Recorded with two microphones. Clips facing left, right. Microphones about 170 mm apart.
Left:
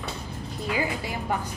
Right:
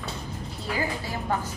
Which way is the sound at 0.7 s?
15° left (ahead or behind).